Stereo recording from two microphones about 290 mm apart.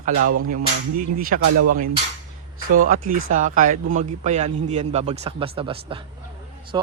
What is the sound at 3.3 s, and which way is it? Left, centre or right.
Cap gun, right.